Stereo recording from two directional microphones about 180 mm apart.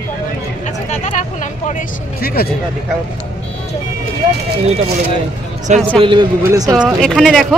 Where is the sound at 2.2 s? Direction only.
55° left (ahead or behind).